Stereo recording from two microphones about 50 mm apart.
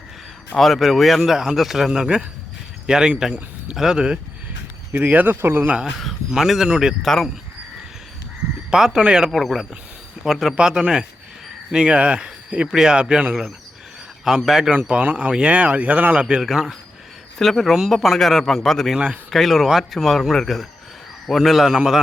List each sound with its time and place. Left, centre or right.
0.6 s speech: centre
4.9 s speech: right
5.4 s speech: right
5.6 s speech: right
6.3 s speech: centre
7.0 s speech: centre
8.7 s speech: centre
9.3 s speech: centre; by 13.3 s right
14.3 s speech: centre
14.8 s speech: right
16.2 s speech: centre
17.3 s speech: centre